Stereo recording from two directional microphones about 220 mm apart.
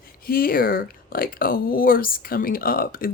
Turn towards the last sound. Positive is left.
turn(degrees=40)  # may be behind; listen again after turning